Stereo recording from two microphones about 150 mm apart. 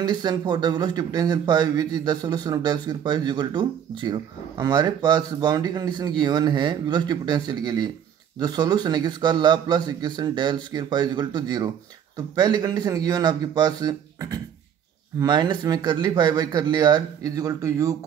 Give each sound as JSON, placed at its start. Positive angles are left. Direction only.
{"t": 0.0, "sound": "speech", "side_deg": -25}